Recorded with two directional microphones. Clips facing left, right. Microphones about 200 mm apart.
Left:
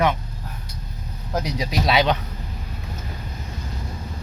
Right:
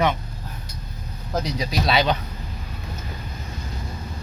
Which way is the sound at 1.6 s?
10° left (ahead or behind).